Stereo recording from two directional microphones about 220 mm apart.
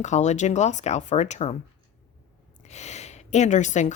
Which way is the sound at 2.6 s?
30° left (ahead or behind).